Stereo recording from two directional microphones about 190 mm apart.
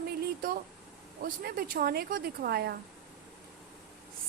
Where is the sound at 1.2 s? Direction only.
50° right (ahead or behind).